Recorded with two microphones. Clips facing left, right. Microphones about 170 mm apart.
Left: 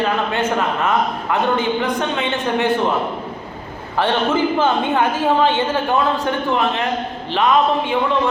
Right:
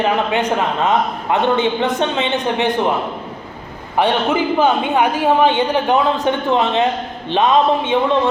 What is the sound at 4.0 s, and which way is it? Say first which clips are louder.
A man's voice: right 1 dB; 15° right (ahead or behind).